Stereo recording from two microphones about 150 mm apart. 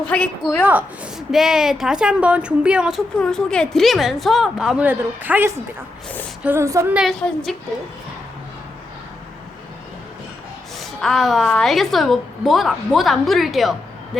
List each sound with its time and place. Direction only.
0.1 s a woman's voice: 10° left (ahead or behind)
0.6 s a woman's voice: 10° right (ahead or behind)
6.9 s a woman's voice: centre (ahead or behind)
10.8 s a woman's voice: centre (ahead or behind)